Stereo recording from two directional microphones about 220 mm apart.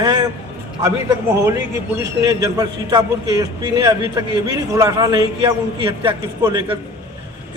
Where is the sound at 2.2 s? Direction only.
15° right (ahead or behind).